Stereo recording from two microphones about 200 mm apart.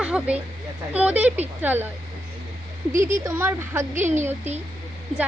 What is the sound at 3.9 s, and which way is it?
Speech, 35° right (ahead or behind).